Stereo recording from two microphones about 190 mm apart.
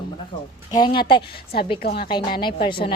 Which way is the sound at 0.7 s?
20° left (ahead or behind).